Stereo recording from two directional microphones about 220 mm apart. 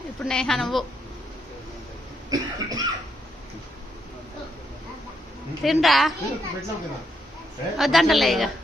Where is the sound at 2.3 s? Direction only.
15° right (ahead or behind).